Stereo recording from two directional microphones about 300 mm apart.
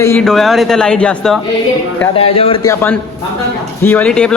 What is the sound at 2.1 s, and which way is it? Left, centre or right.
A man's voice, centre.